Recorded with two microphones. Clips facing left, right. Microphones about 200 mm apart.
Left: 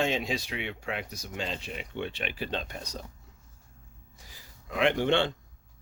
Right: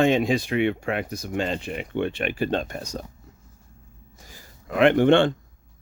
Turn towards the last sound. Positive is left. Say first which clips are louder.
# right 9 dB
turn(degrees=-50)  # may be behind; listen again after turning